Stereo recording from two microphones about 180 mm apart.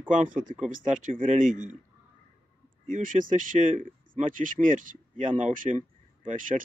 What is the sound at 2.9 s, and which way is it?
Speech, 50° right (ahead or behind).